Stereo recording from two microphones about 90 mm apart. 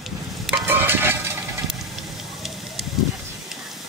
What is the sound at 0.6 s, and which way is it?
Stir, 25° right (ahead or behind).